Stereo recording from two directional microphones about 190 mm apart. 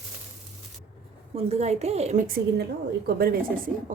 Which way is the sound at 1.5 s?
35° right (ahead or behind).